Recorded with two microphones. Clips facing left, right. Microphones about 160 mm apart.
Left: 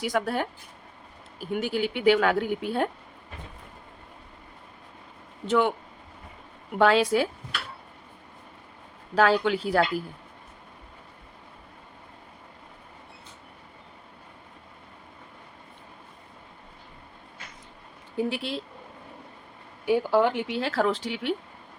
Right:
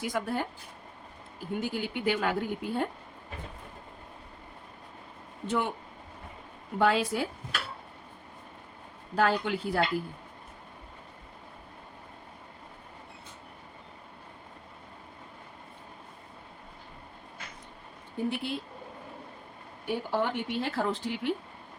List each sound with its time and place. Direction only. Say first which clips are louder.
0.0 s speech: left 4 dB; 85° left
5.5 s speech: left 7 dB; 90° left
6.7 s speech: left 5 dB; 90° left
9.1 s speech: left 5 dB; 90° left
18.2 s speech: left 3 dB; 90° left
19.8 s speech: left 8 dB; 90° left